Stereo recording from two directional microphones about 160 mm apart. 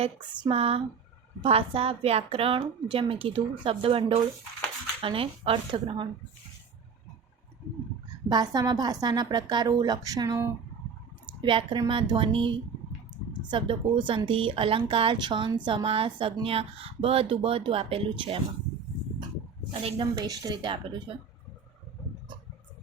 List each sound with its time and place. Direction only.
0.0 s speech: 35° right (ahead or behind)
8.3 s a woman's voice: 25° right (ahead or behind)
11.3 s speech: 30° right (ahead or behind)
20.0 s a woman's voice: 25° right (ahead or behind)